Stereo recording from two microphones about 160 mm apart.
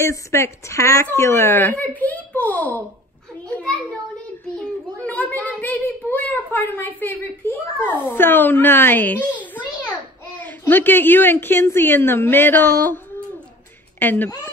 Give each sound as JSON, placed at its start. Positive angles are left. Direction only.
{"t": 0.0, "sound": "a woman's voice", "side_deg": 15}
{"t": 5.0, "sound": "a child's voice", "side_deg": 10}
{"t": 9.4, "sound": "a sound", "side_deg": 10}
{"t": 10.4, "sound": "a woman's voice", "side_deg": 10}